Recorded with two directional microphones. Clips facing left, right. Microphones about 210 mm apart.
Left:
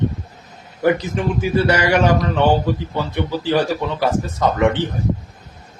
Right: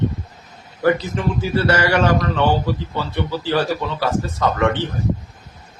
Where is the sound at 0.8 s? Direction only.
15° left (ahead or behind).